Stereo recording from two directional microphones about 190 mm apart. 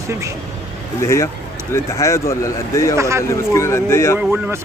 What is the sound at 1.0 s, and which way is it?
Speech, 15° left (ahead or behind).